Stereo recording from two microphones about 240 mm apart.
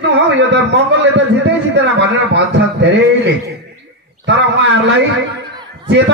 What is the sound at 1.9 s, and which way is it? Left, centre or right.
A man's voice, right.